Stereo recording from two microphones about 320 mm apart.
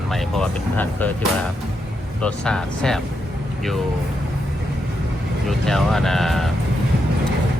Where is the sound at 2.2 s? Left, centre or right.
Centre.